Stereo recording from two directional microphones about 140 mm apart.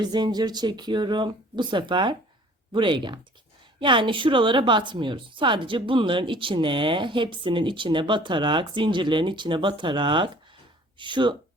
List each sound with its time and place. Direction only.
0.0 s a woman's voice: 30° right (ahead or behind)